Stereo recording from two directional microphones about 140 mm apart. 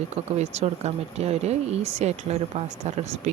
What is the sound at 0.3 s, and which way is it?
Speech, 50° right (ahead or behind).